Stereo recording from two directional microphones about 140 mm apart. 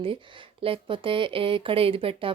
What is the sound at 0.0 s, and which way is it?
Speech, 40° right (ahead or behind).